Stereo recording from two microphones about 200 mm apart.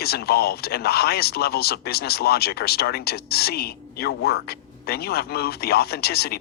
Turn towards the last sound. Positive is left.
turn(degrees=50)  # may be behind; listen again after turning